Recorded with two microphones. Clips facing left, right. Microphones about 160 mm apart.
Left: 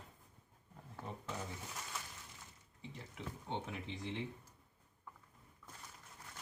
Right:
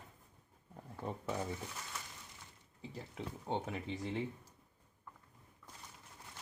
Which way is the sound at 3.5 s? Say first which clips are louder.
Right 5 dB; 40° right (ahead or behind).